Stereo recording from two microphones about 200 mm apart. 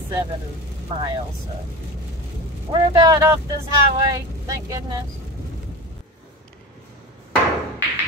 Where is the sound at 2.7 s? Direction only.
20° right (ahead or behind).